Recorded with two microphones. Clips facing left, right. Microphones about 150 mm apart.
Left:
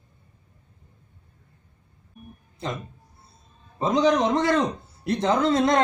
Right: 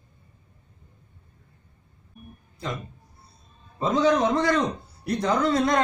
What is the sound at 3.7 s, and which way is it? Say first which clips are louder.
Speech: left 1 dB; 20° left (ahead or behind).